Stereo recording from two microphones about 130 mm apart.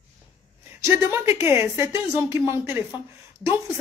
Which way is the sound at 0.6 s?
20° right (ahead or behind).